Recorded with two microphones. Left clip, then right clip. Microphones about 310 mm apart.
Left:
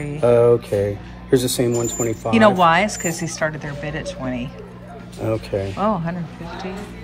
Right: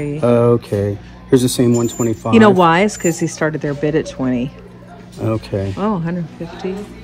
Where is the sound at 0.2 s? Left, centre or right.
Centre.